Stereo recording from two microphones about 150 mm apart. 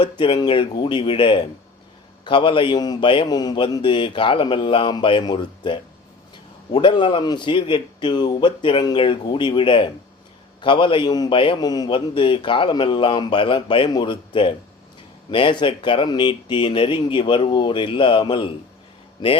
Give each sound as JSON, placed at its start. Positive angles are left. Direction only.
{"t": 0.0, "sound": "a man's voice", "side_deg": 35}